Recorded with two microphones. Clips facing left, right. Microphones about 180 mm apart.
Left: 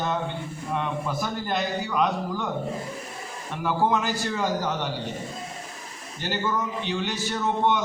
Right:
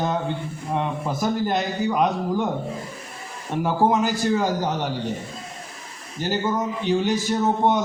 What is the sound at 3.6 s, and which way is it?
Speech, 40° right (ahead or behind).